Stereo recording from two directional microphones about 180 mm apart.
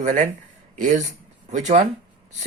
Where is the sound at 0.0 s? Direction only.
40° right (ahead or behind).